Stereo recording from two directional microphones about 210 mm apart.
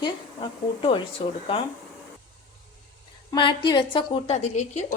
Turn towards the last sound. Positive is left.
turn(degrees=30)  # may be behind; listen again after turning